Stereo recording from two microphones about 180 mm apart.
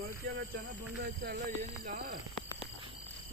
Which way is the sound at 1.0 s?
60° right (ahead or behind).